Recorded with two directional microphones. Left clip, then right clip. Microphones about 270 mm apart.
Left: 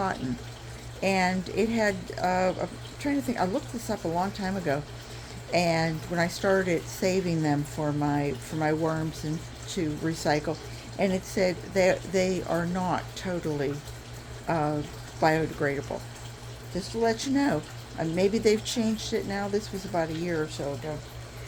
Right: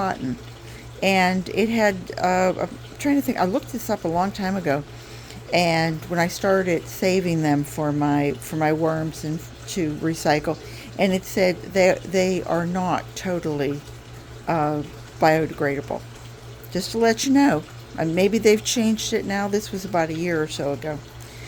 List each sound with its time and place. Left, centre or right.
0.2 s speech: centre
16.7 s speech: right